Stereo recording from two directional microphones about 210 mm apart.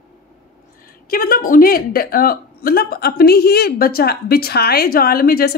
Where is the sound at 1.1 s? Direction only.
45° left (ahead or behind).